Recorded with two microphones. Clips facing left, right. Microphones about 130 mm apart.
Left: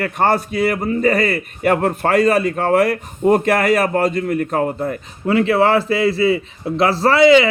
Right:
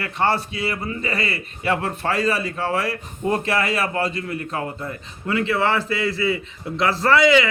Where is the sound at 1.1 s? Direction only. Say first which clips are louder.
Left 8 dB; 55° left (ahead or behind).